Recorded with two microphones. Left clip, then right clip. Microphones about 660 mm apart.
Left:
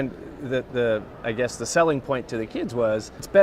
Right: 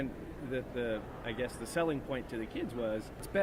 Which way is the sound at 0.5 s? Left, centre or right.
Left.